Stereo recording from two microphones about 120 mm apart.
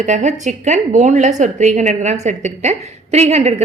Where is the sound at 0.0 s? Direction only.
85° right.